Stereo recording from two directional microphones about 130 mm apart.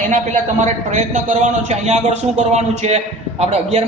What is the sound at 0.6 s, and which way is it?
A man's voice, 65° right (ahead or behind).